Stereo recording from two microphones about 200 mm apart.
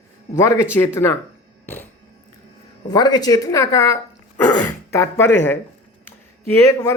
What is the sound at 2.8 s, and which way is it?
Speech, 20° left (ahead or behind).